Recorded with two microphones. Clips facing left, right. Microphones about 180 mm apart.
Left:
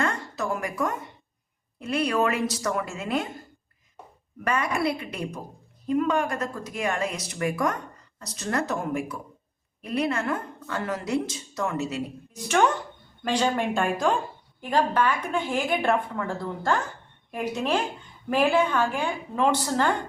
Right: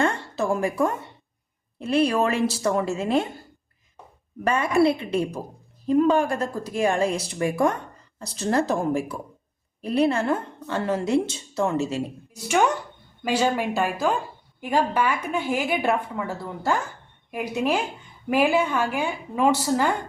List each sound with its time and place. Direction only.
0.0 s a sound: 30° right (ahead or behind)
1.8 s speech: 30° right (ahead or behind)
4.4 s speech: 25° right (ahead or behind)
12.3 s a woman's voice: 10° right (ahead or behind)